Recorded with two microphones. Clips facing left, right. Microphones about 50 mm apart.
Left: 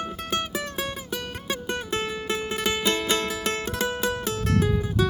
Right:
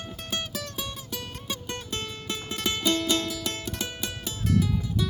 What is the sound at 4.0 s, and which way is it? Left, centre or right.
Music, left.